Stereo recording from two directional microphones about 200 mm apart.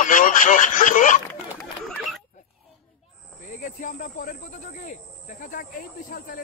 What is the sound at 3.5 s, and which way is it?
Speech, 40° left (ahead or behind).